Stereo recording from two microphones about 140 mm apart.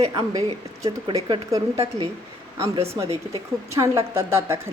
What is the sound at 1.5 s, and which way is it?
A woman's voice, 25° right (ahead or behind).